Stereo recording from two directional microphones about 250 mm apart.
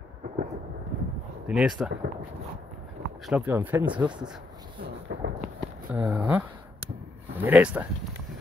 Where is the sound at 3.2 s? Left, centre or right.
Centre.